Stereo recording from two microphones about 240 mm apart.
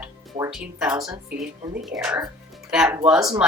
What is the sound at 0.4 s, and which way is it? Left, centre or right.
Speech, right.